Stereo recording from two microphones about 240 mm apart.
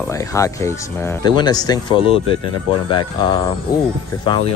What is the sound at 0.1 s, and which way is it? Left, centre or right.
Speech, centre.